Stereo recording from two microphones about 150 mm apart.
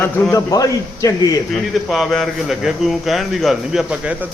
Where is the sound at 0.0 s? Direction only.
15° left (ahead or behind).